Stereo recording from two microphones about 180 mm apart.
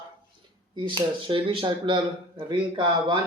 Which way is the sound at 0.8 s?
25° right (ahead or behind).